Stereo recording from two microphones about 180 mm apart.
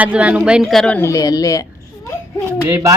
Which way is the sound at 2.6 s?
15° right (ahead or behind).